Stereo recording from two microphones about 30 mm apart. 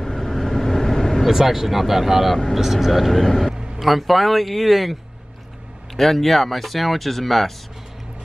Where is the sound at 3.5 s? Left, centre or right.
Right.